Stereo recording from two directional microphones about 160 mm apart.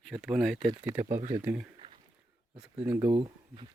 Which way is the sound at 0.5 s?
35° right (ahead or behind).